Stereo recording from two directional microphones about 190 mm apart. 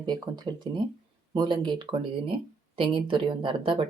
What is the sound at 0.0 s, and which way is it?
Speech, 20° right (ahead or behind).